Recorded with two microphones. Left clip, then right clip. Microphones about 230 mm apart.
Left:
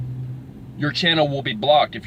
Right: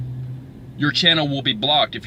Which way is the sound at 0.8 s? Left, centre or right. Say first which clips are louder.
Right 2 dB; centre.